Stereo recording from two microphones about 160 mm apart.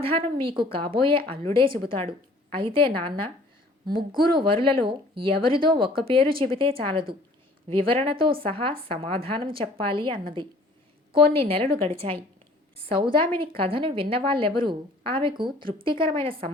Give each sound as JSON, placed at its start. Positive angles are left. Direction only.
{"t": 0.0, "sound": "speech", "side_deg": -35}
{"t": 4.4, "sound": "speech", "side_deg": -35}